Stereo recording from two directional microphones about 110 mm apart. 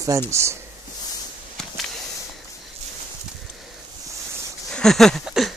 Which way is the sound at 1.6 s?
5° left (ahead or behind).